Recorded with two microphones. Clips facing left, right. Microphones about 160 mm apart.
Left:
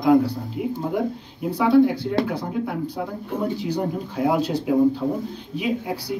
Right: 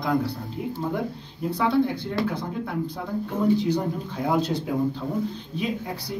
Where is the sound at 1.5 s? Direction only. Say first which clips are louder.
Left 6 dB; 10° left (ahead or behind).